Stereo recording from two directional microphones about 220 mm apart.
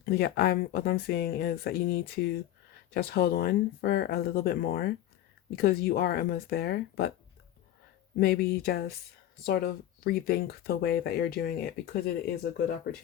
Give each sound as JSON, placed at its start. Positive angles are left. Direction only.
{"t": 0.0, "sound": "speech", "side_deg": 45}
{"t": 8.1, "sound": "speech", "side_deg": 45}